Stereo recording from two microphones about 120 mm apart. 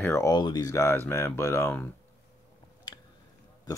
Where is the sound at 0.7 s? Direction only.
20° left (ahead or behind).